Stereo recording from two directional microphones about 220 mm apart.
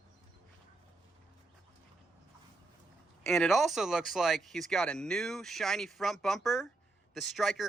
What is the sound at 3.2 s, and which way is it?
Speech, centre (ahead or behind).